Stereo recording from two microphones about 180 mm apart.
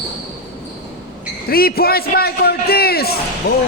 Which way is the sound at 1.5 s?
55° left (ahead or behind).